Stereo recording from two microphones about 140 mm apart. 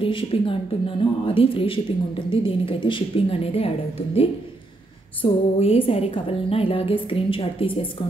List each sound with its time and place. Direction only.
0.0 s speech: 40° left (ahead or behind)